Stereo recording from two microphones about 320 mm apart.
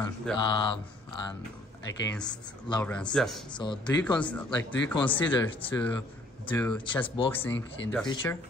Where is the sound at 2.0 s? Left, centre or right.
Centre.